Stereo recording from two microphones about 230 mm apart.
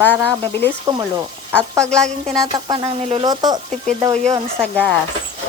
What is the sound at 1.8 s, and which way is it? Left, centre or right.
Speech, centre.